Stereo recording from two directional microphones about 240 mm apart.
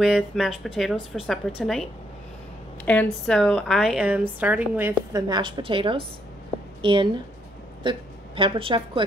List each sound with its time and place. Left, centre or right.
0.0 s a woman's voice: centre; by 7.1 s right
8.4 s a woman's voice: right